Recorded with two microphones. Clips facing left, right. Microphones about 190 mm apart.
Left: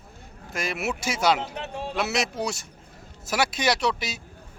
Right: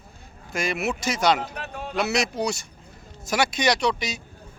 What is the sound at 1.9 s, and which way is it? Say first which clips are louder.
Speech: right 3 dB; centre (ahead or behind).